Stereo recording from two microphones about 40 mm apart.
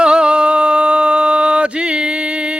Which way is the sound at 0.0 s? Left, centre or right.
Right.